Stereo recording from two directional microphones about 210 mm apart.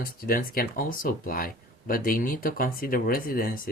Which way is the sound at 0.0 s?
45° left (ahead or behind).